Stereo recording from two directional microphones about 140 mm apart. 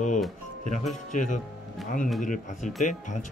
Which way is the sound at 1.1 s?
65° left (ahead or behind).